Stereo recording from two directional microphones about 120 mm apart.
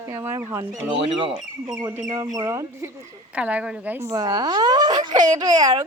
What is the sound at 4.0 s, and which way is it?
A woman's voice, 30° right (ahead or behind).